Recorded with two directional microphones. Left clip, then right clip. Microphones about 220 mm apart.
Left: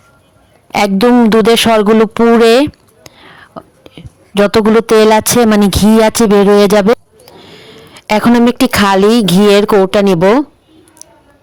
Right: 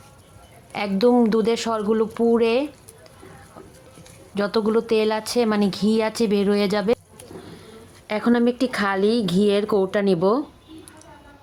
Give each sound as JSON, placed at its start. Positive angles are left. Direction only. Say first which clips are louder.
{"t": 0.7, "sound": "a man's voice", "louder": "left 10 dB", "side_deg": 40}
{"t": 4.4, "sound": "a man's voice", "louder": "left 12 dB", "side_deg": 40}
{"t": 7.4, "sound": "a sound", "louder": "left 8 dB", "side_deg": 40}
{"t": 8.5, "sound": "a man's voice", "louder": "left 13 dB", "side_deg": 40}